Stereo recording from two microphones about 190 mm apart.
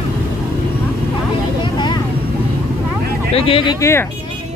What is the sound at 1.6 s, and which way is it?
Vehicle, 20° left (ahead or behind).